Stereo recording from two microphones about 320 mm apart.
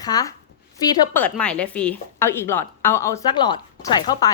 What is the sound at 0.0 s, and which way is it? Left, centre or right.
A woman's voice, centre.